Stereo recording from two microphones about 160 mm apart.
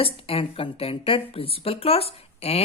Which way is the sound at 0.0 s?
35° left (ahead or behind).